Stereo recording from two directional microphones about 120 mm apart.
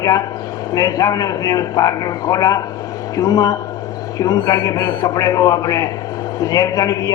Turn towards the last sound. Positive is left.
turn(degrees=30)  # may be behind; listen again after turning